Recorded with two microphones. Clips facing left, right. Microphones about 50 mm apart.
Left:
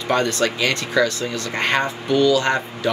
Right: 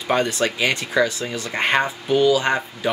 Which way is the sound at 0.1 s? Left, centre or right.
Centre.